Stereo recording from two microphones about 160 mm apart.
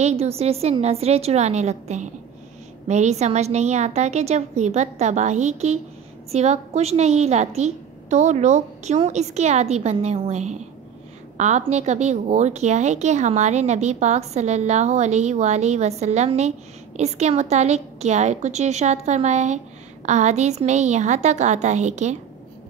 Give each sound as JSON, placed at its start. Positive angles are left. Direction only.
{"t": 0.0, "sound": "a woman's voice", "side_deg": -40}